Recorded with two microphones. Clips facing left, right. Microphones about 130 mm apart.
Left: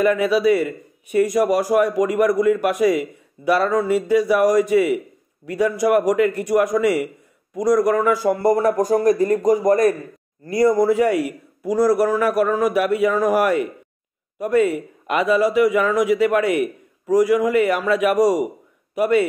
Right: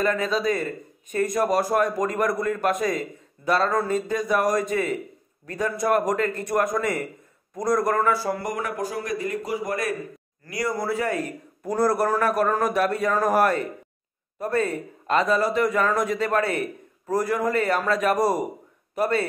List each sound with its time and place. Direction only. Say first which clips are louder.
0.0 s a man's voice: left 7 dB; 10° left (ahead or behind)
8.3 s a man's voice: left 11 dB; 30° left (ahead or behind)
10.4 s a man's voice: left 11 dB; 25° left (ahead or behind)